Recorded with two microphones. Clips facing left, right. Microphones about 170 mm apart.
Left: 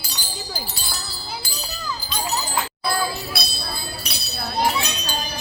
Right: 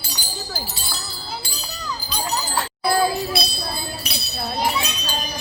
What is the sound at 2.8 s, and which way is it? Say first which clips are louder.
Jingle bell: right 7 dB; 30° right (ahead or behind).